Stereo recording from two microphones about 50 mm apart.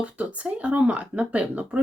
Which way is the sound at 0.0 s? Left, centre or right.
Right.